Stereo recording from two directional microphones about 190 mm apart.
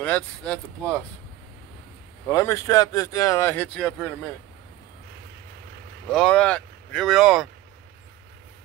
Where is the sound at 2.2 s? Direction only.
15° left (ahead or behind).